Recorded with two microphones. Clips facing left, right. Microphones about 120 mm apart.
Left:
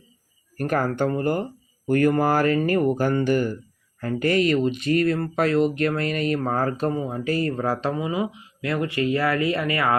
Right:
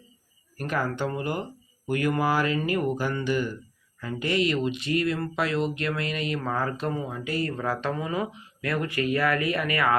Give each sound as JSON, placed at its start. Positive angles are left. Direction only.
{"t": 0.5, "sound": "speech", "side_deg": 50}
{"t": 7.9, "sound": "speech", "side_deg": 20}